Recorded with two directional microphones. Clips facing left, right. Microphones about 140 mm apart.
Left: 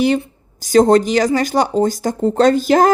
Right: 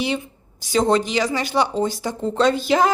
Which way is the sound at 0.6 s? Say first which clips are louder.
Left 7 dB; 45° left (ahead or behind).